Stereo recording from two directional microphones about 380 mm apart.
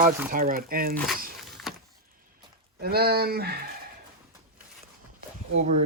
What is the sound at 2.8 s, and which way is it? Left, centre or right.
Speech, right.